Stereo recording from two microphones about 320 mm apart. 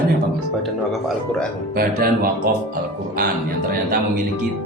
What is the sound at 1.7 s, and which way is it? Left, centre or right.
Speech, right.